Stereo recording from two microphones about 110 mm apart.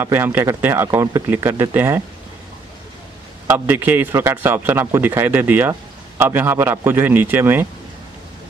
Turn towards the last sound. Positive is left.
turn(degrees=-20)  # may be behind; listen again after turning